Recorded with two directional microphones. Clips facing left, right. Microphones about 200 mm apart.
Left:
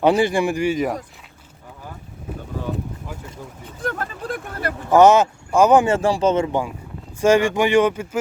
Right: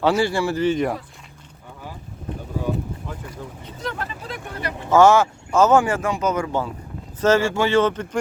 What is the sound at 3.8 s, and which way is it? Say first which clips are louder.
Speech: left 4 dB; 45° left (ahead or behind).